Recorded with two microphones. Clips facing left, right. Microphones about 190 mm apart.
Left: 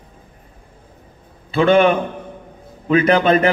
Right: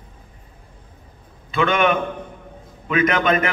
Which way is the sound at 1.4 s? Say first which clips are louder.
Left 6 dB; 35° left (ahead or behind).